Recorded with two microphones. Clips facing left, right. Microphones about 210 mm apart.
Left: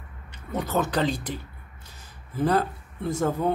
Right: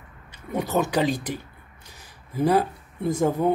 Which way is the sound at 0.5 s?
15° right (ahead or behind).